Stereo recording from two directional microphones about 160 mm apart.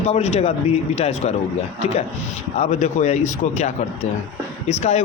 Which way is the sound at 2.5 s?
45° left (ahead or behind).